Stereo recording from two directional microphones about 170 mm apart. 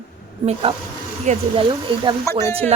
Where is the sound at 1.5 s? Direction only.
30° right (ahead or behind).